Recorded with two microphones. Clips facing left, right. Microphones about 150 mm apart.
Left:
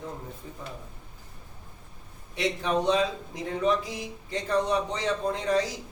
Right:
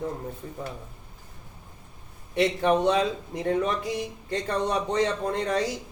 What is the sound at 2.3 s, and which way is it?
Speech, 60° right (ahead or behind).